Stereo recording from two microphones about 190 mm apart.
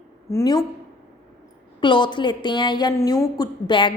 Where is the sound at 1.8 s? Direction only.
25° left (ahead or behind).